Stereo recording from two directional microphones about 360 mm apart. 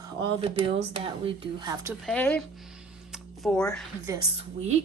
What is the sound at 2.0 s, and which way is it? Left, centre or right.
Speech, centre.